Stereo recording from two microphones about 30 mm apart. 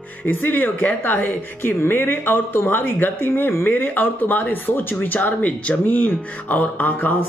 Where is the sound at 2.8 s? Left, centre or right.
Left.